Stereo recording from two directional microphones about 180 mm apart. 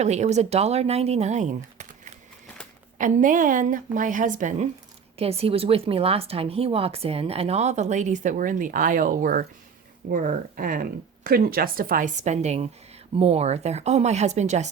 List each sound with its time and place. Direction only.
0.0 s speech: 40° right (ahead or behind)
3.0 s speech: 45° right (ahead or behind)
5.1 s speech: 35° right (ahead or behind)